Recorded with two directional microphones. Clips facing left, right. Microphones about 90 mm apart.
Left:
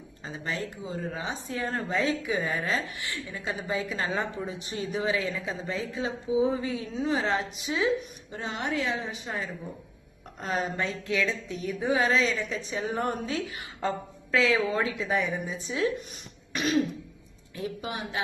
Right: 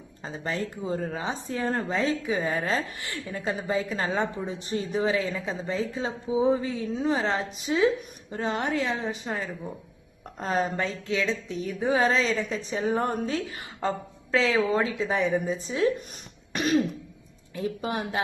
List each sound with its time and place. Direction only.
0.3 s speech: 40° right (ahead or behind)
10.4 s speech: 40° right (ahead or behind)
16.5 s throat clearing: 45° right (ahead or behind)
17.6 s speech: 40° right (ahead or behind)